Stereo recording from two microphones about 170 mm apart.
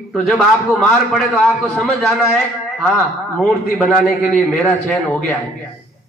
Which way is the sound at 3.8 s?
5° left (ahead or behind).